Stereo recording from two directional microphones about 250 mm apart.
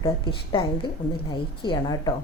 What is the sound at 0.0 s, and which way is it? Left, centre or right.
A woman's voice, centre.